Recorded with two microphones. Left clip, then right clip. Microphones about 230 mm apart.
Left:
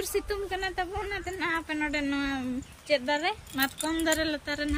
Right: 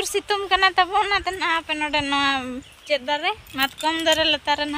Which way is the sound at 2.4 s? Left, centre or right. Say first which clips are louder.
Right 4 dB; centre.